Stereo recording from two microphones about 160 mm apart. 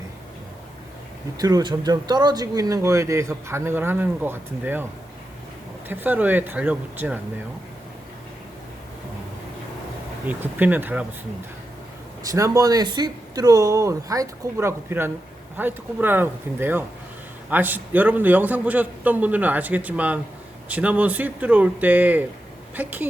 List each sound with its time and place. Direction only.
1.4 s speech: 25° right (ahead or behind)
5.9 s a man's voice: 10° right (ahead or behind)
10.2 s a man's voice: 10° right (ahead or behind)
12.2 s a man's voice: 20° right (ahead or behind)